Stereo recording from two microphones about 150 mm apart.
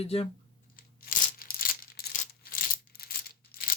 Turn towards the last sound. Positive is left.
turn(degrees=90)